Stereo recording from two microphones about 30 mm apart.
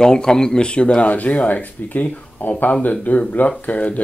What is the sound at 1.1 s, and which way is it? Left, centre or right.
Speech, left.